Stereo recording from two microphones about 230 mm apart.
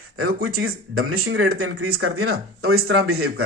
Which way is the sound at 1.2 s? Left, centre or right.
Right.